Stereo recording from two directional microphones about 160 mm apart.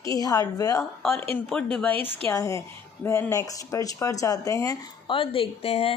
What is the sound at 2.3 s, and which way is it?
A woman's voice, 20° left (ahead or behind).